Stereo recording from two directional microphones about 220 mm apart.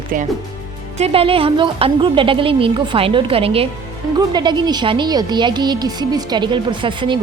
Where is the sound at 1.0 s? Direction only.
25° right (ahead or behind).